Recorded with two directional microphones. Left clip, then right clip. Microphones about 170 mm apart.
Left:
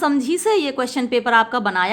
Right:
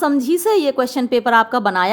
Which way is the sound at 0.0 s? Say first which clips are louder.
Right 2 dB; 25° right (ahead or behind).